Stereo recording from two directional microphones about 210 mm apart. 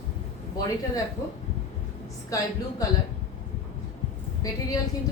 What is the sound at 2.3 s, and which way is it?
Speech, 15° left (ahead or behind).